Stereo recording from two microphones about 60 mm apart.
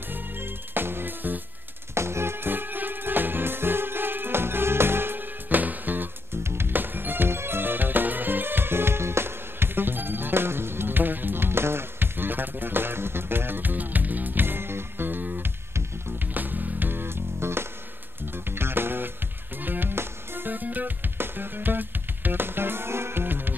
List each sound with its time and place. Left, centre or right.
0.1 s music: right
2.0 s music: right